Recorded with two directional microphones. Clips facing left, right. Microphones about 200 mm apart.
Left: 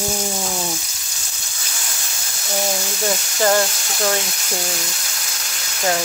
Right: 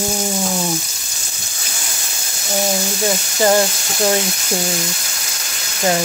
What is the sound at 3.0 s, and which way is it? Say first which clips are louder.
Speech: right 2 dB; 10° right (ahead or behind).